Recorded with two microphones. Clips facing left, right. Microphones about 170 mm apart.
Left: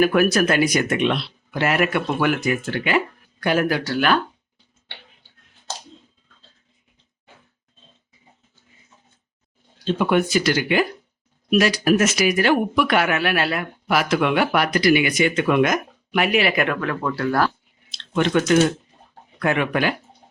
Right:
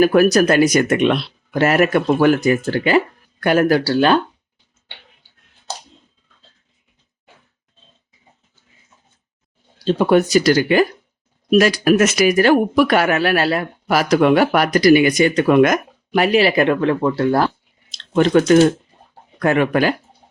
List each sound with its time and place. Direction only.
0.0 s speech: 35° right (ahead or behind)
3.4 s speech: 50° right (ahead or behind); by 4.2 s 30° right (ahead or behind)
9.7 s speech: 35° right (ahead or behind); by 12.2 s 60° right (ahead or behind)
12.2 s speech: 40° right (ahead or behind); by 17.5 s 25° right (ahead or behind)
17.9 s chewing: 40° right (ahead or behind)
19.4 s speech: 40° right (ahead or behind)